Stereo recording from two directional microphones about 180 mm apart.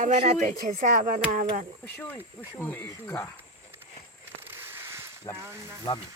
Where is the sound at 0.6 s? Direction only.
50° right (ahead or behind).